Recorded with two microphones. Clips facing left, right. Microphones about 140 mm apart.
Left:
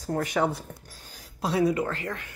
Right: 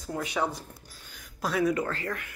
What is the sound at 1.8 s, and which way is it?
Speech, 20° left (ahead or behind).